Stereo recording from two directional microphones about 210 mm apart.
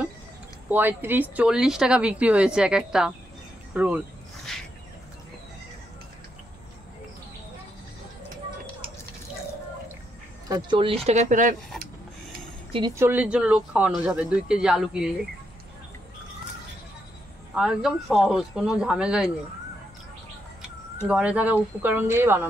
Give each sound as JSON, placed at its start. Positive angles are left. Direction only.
{"t": 0.7, "sound": "speech", "side_deg": -10}
{"t": 4.5, "sound": "a sound", "side_deg": 0}
{"t": 10.5, "sound": "speech", "side_deg": -25}
{"t": 12.7, "sound": "speech", "side_deg": -15}
{"t": 17.6, "sound": "speech", "side_deg": -5}
{"t": 21.1, "sound": "speech", "side_deg": -5}